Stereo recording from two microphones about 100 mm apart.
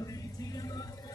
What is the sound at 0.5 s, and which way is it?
Vehicle, 40° left (ahead or behind).